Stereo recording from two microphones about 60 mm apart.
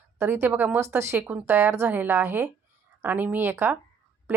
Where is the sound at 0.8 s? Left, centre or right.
Right.